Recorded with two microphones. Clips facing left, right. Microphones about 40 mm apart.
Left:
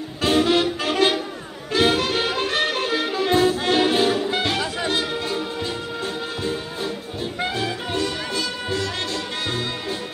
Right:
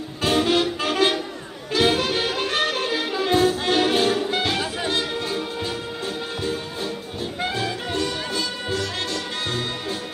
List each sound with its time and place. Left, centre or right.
0.2 s music: centre